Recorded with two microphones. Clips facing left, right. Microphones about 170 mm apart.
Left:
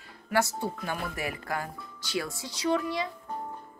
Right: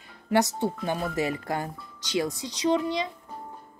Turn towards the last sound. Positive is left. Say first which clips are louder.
# right 3 dB
turn(degrees=-20)  # may be behind; listen again after turning